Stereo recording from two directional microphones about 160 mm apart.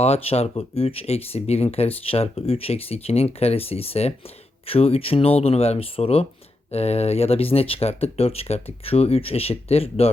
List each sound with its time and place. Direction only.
0.0 s speech: 40° left (ahead or behind)